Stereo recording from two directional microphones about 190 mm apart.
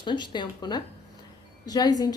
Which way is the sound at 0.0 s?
25° left (ahead or behind).